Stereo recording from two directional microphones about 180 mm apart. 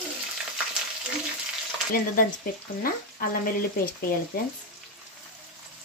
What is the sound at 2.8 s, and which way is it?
Speech, 55° left (ahead or behind).